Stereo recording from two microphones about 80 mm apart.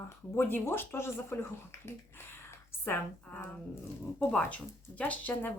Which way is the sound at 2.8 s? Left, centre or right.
Left.